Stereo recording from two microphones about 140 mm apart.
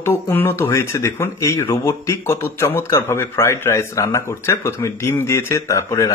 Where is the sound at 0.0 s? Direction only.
15° left (ahead or behind).